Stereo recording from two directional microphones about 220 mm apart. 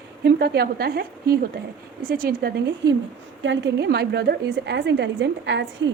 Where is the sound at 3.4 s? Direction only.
55° right (ahead or behind).